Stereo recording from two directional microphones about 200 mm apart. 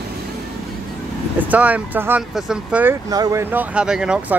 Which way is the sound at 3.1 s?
15° right (ahead or behind).